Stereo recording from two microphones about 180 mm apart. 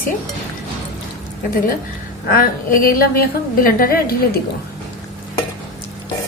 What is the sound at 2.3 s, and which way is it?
A woman's voice, 50° left (ahead or behind).